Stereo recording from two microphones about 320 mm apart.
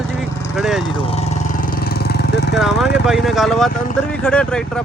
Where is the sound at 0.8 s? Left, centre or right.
Centre.